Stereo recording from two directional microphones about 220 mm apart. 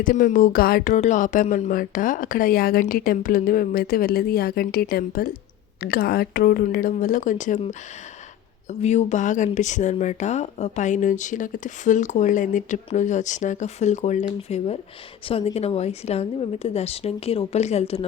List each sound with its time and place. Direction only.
0.0 s speech: 40° left (ahead or behind)
8.8 s a woman's voice: 30° left (ahead or behind)